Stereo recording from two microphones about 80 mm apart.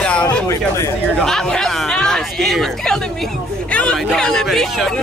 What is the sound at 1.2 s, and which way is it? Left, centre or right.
Speech, centre.